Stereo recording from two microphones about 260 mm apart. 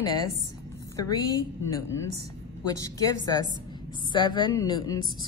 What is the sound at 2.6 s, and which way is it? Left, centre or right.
A woman's voice, centre.